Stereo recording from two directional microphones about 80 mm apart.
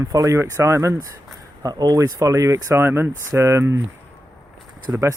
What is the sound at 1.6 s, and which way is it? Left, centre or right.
Speech, right.